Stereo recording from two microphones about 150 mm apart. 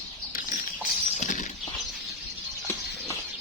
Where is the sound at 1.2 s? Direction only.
55° left (ahead or behind).